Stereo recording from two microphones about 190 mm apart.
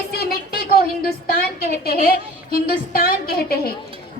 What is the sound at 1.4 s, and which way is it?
A woman's voice, 50° left (ahead or behind).